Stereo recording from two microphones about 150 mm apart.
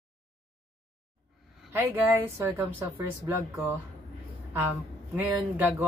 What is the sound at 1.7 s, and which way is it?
Speech, 15° right (ahead or behind).